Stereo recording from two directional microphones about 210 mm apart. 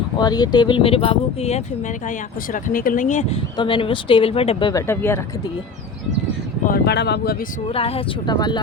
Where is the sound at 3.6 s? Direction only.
25° left (ahead or behind).